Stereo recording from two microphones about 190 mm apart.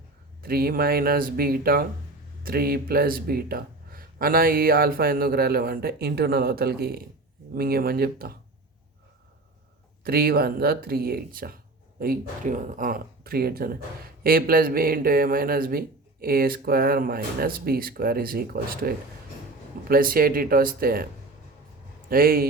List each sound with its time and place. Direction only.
0.4 s speech: 50° right (ahead or behind)
10.0 s speech: 50° right (ahead or behind)
22.1 s speech: 50° right (ahead or behind)